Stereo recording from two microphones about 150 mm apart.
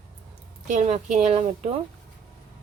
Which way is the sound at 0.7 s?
50° right (ahead or behind).